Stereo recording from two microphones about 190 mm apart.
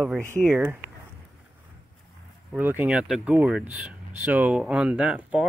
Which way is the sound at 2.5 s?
10° right (ahead or behind).